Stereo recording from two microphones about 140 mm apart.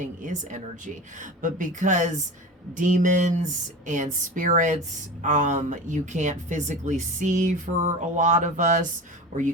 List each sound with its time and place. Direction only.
0.0 s speech: 65° right (ahead or behind)
2.9 s a sound: 70° right (ahead or behind)
3.8 s speech: 65° right (ahead or behind)